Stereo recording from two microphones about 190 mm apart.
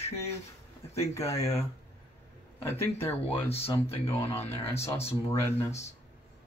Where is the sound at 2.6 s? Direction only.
15° left (ahead or behind).